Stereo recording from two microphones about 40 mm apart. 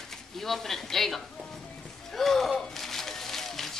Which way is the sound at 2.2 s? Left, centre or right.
Centre.